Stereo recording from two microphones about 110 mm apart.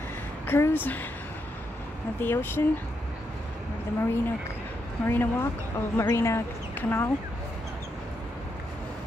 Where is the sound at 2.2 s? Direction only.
20° left (ahead or behind).